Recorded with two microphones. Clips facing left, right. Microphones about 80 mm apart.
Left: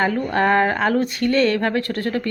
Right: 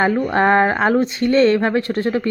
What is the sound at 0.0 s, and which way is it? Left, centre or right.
Speech, right.